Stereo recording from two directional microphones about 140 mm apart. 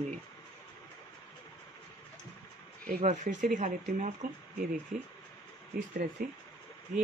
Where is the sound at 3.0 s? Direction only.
65° right (ahead or behind).